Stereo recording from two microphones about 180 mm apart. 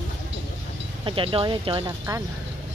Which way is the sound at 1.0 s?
30° right (ahead or behind).